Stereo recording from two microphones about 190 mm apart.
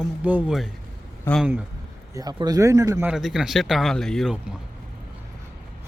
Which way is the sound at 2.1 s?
20° right (ahead or behind).